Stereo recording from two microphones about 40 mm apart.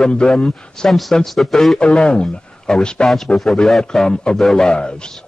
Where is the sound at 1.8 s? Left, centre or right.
Left.